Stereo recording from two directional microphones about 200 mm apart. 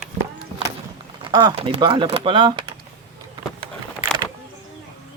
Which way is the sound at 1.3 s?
20° right (ahead or behind).